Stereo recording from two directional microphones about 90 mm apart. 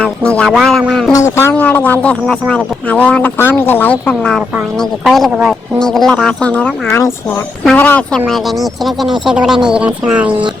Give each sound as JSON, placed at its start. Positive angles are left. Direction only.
{"t": 0.0, "sound": "speech", "side_deg": 10}
{"t": 0.5, "sound": "speech", "side_deg": 0}
{"t": 1.1, "sound": "speech", "side_deg": 30}
{"t": 1.5, "sound": "speech", "side_deg": 15}
{"t": 4.1, "sound": "speech", "side_deg": 5}
{"t": 5.3, "sound": "speech", "side_deg": -10}
{"t": 5.8, "sound": "speech", "side_deg": 5}
{"t": 8.3, "sound": "speech", "side_deg": 0}